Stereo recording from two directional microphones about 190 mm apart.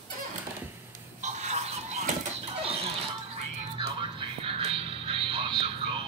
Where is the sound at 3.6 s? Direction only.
30° right (ahead or behind).